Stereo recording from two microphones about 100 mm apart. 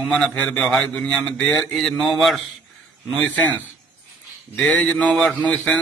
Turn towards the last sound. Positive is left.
turn(degrees=10)  # may be behind; listen again after turning